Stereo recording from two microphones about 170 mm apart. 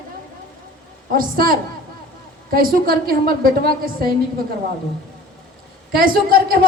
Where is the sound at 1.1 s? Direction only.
55° right (ahead or behind).